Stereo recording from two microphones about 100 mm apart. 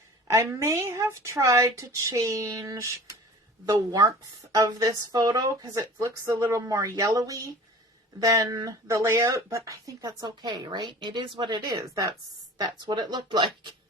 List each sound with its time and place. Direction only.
0.3 s speech: 30° right (ahead or behind); by 13.7 s 50° right (ahead or behind)